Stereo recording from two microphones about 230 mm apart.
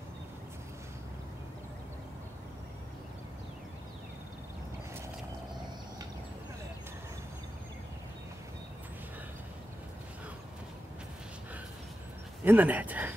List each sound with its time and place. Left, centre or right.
12.4 s speech: centre